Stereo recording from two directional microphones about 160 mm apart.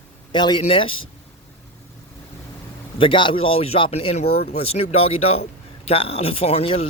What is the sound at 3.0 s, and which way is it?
Speech, 30° left (ahead or behind).